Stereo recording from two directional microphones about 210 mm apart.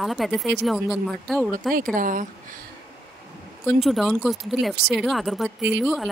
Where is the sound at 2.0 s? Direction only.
40° right (ahead or behind).